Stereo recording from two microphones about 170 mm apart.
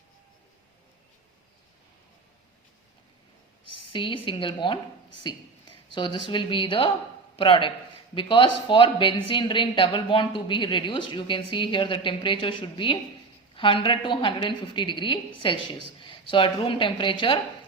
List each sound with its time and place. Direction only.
3.9 s a woman's voice: 30° left (ahead or behind)